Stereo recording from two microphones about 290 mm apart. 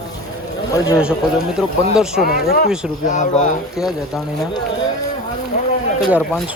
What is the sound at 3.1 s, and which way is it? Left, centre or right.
Speech, left.